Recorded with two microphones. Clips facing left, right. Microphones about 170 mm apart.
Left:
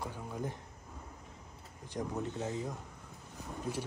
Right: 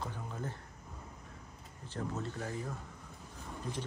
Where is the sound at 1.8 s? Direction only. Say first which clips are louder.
Left 2 dB; 15° left (ahead or behind).